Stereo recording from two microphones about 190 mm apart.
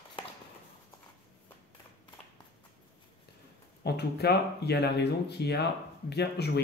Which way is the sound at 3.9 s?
60° left (ahead or behind).